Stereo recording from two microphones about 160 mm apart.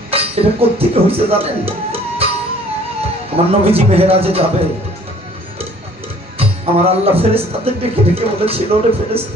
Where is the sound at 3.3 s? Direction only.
35° right (ahead or behind).